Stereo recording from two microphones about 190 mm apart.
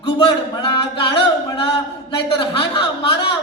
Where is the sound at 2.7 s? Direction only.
20° left (ahead or behind).